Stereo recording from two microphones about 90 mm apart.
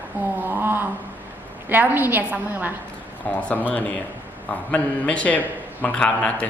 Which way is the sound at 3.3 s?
15° left (ahead or behind).